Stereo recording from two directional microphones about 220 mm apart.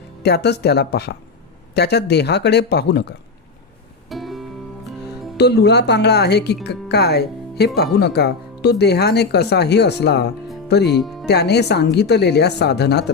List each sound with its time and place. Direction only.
0.2 s speech: 50° left (ahead or behind)
4.1 s music: centre (ahead or behind)
5.4 s speech: 50° left (ahead or behind)
10.9 s speech: centre (ahead or behind)
11.3 s speech: 50° left (ahead or behind)